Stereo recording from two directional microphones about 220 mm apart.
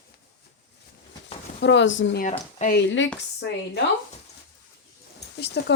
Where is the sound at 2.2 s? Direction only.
35° left (ahead or behind).